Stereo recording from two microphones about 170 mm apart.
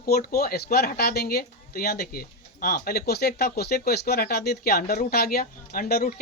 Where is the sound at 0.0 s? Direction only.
60° left (ahead or behind).